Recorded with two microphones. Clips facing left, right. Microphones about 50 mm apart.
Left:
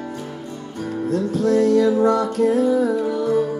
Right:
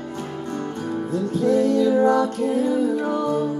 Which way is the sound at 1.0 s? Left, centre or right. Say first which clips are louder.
Left 2 dB; left.